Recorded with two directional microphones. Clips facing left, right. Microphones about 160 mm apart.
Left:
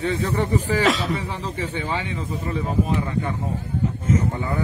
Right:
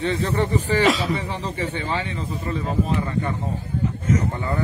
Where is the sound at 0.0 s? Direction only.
5° left (ahead or behind).